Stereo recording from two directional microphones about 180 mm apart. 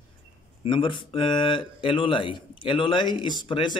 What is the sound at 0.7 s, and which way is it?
Speech, 25° left (ahead or behind).